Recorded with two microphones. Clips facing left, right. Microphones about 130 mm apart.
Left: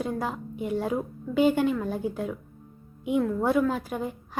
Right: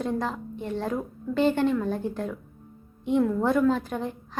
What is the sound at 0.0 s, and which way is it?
A woman's voice, 5° left (ahead or behind).